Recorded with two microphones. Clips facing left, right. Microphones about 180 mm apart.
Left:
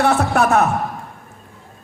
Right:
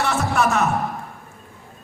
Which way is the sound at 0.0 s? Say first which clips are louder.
Left 4 dB; 60° left (ahead or behind).